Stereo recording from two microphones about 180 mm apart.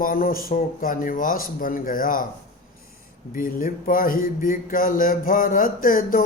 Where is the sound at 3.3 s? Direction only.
50° left (ahead or behind).